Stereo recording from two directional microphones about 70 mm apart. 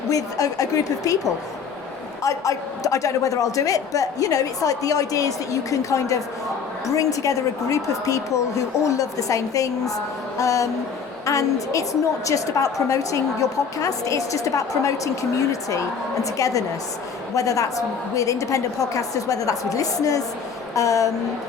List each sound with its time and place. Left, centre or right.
0.1 s a man's voice: left